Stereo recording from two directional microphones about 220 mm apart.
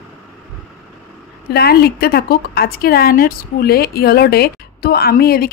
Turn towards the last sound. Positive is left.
turn(degrees=45)  # may be behind; listen again after turning